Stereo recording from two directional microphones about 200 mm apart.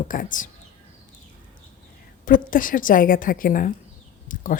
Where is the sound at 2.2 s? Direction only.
40° left (ahead or behind).